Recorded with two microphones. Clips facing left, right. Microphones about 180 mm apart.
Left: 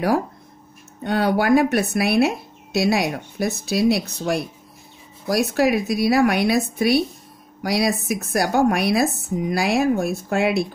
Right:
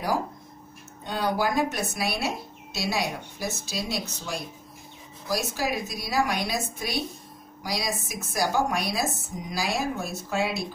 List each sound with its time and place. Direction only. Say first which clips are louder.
1.0 s speech: left 7 dB; 65° left (ahead or behind)